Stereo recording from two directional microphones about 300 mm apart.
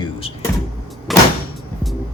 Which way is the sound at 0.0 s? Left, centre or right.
Centre.